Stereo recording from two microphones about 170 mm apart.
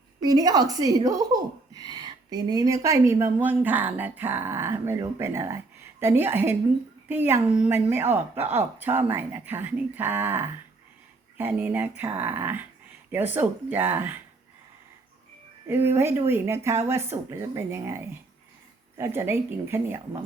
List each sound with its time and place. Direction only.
0.2 s speech: 25° right (ahead or behind)
15.6 s speech: 15° right (ahead or behind)